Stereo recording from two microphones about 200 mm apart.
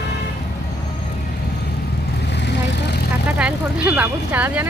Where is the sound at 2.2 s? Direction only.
60° left (ahead or behind).